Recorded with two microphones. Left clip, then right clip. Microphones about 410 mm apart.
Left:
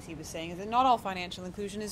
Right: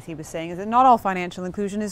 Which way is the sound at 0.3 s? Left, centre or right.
Right.